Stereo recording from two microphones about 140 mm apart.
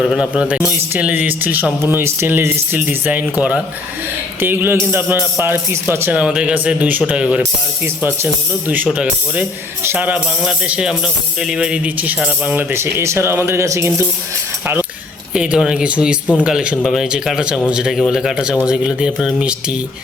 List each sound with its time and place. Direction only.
0.0 s speech: 5° right (ahead or behind); by 14.1 s 20° right (ahead or behind)
15.4 s a man's voice: 5° right (ahead or behind)